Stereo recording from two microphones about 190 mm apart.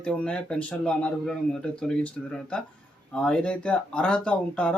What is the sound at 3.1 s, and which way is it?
Speech, 5° left (ahead or behind).